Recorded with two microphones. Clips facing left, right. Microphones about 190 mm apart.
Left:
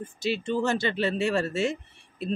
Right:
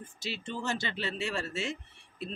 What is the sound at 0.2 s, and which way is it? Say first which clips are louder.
Speech: left 11 dB; 60° left (ahead or behind).